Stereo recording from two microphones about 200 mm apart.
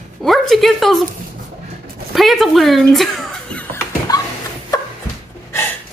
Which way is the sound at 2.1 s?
Centre (ahead or behind).